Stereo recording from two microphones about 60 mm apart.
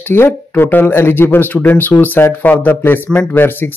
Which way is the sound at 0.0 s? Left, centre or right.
Left.